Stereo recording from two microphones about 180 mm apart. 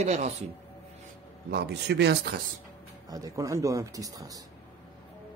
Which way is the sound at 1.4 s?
65° right (ahead or behind).